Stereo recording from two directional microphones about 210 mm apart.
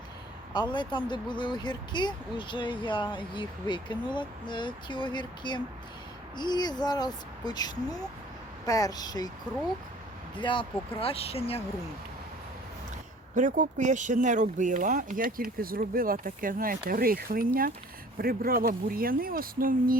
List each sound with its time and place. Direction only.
0.5 s speech: 20° left (ahead or behind)
10.3 s speech: 25° left (ahead or behind)
13.3 s speech: 35° right (ahead or behind)